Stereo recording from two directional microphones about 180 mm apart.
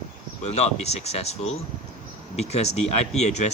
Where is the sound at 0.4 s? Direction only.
35° left (ahead or behind).